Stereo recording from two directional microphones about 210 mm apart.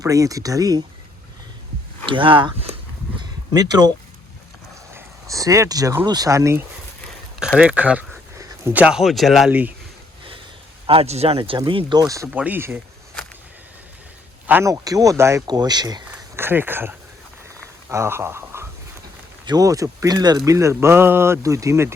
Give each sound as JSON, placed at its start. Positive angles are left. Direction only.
{"t": 0.0, "sound": "speech", "side_deg": -15}
{"t": 2.0, "sound": "speech", "side_deg": -25}
{"t": 3.2, "sound": "a sound", "side_deg": -20}
{"t": 4.9, "sound": "speech", "side_deg": -15}
{"t": 7.3, "sound": "a sound", "side_deg": 0}
{"t": 8.4, "sound": "speech", "side_deg": -10}
{"t": 10.8, "sound": "speech", "side_deg": -30}
{"t": 14.4, "sound": "speech", "side_deg": -10}
{"t": 17.8, "sound": "a sound", "side_deg": -10}
{"t": 19.5, "sound": "speech", "side_deg": -15}